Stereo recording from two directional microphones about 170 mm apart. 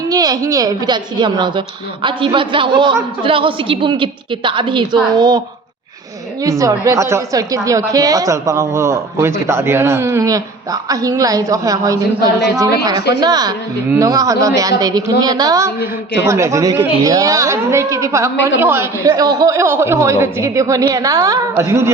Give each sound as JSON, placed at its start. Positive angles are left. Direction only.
{"t": 0.1, "sound": "a woman's voice", "side_deg": -20}
{"t": 6.4, "sound": "a woman's voice", "side_deg": -20}